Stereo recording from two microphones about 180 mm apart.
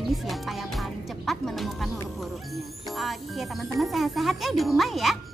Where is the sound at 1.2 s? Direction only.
Centre (ahead or behind).